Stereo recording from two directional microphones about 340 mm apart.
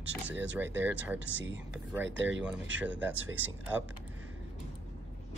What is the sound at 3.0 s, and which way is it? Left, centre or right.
Speech, centre.